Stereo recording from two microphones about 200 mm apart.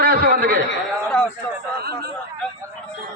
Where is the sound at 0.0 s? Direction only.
50° right (ahead or behind).